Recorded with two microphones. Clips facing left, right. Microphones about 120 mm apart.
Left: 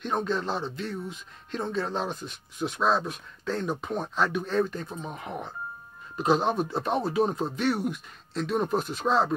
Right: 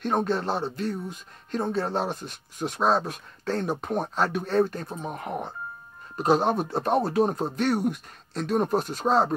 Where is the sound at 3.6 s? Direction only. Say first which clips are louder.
Right 2 dB; 50° right (ahead or behind).